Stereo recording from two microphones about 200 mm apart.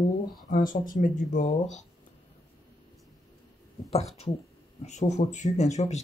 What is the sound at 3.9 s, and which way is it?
Speech, 30° left (ahead or behind).